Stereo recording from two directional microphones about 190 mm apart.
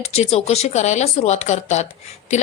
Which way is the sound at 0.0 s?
35° left (ahead or behind).